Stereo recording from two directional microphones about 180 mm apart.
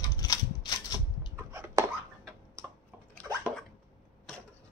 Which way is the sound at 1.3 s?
15° right (ahead or behind).